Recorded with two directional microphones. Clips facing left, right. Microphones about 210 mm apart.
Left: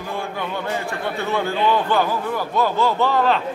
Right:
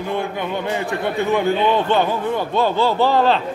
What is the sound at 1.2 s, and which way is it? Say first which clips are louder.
Speech: right 4 dB; 15° right (ahead or behind).